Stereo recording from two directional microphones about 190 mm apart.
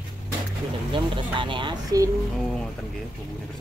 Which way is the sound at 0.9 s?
25° right (ahead or behind).